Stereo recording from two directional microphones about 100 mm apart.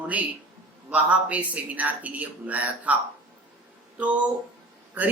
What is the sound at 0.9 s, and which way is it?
A man's voice, 15° right (ahead or behind).